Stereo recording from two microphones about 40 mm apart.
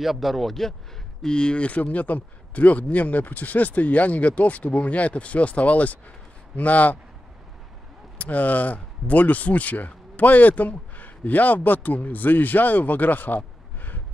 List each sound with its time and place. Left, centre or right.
0.0 s speech: centre
1.2 s speech: left
8.2 s speech: left
13.7 s a sound: left